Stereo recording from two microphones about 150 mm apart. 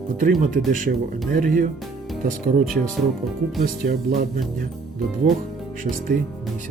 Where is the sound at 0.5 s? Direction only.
65° right (ahead or behind).